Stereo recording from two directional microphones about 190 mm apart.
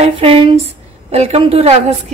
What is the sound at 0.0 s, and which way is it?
Speech, 30° right (ahead or behind).